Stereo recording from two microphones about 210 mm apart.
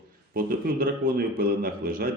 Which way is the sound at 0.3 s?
45° right (ahead or behind).